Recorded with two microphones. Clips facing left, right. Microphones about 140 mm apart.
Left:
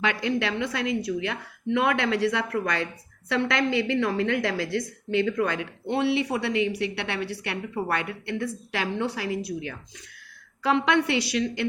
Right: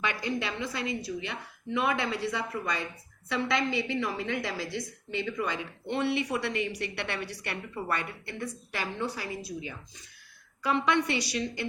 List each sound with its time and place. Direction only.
0.0 s a woman's voice: 80° left
6.2 s a woman's voice: 60° left (ahead or behind)
10.6 s a woman's voice: 70° left (ahead or behind)